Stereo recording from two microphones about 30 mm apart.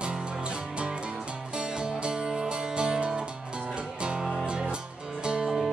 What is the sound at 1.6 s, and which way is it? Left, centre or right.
Music, right.